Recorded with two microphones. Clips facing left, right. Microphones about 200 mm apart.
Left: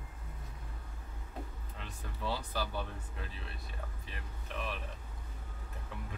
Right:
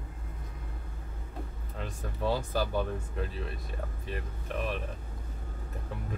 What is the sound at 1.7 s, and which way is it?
Speech, 45° right (ahead or behind).